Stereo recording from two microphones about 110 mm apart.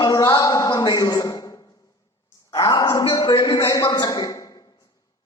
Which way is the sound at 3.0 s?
45° left (ahead or behind).